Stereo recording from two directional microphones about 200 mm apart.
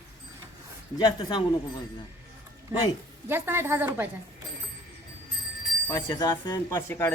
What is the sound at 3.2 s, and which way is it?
Speech, 10° right (ahead or behind).